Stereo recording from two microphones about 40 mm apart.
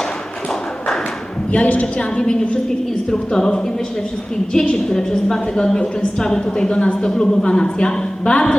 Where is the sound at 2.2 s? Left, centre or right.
Left.